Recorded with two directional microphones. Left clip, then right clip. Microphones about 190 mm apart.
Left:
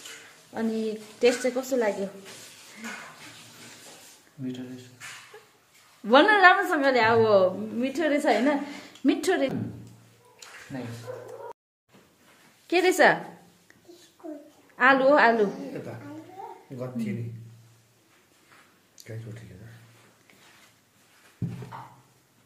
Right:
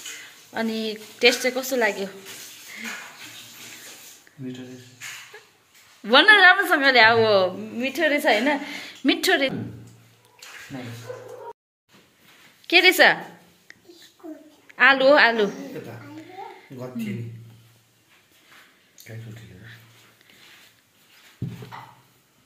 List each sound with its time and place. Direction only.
0.5 s a woman's voice: 10° left (ahead or behind)
1.6 s a woman's voice: 5° right (ahead or behind)
6.0 s a woman's voice: 10° left (ahead or behind)
10.7 s speech: 20° left (ahead or behind)
12.6 s speech: 5° left (ahead or behind)
14.8 s a woman's voice: 5° left (ahead or behind)